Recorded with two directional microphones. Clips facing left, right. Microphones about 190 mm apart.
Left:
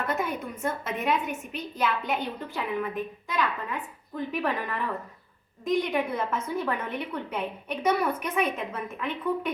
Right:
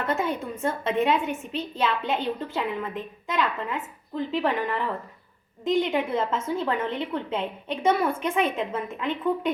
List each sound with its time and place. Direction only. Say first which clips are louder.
0.1 s a woman's voice: right 3 dB; 25° right (ahead or behind)